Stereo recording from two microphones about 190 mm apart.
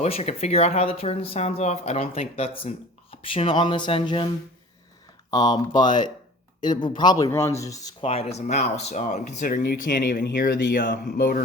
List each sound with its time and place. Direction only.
0.0 s speech: 35° left (ahead or behind)
5.3 s speech: 20° left (ahead or behind)
8.0 s speech: 30° left (ahead or behind); by 11.0 s 55° left (ahead or behind)
11.2 s a sound: 45° left (ahead or behind)